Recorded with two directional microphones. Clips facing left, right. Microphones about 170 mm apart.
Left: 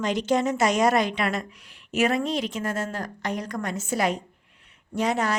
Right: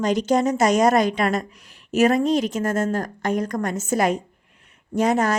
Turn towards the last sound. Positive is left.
turn(degrees=-45)  # may be behind; listen again after turning